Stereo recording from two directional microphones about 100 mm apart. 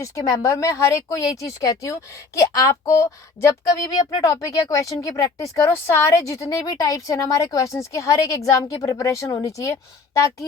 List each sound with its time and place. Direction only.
0.0 s a woman's voice: 30° left (ahead or behind)